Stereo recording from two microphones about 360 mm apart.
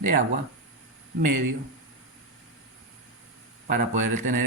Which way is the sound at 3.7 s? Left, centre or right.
Right.